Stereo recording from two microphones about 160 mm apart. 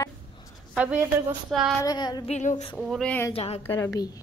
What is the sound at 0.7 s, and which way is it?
Speech, 5° right (ahead or behind).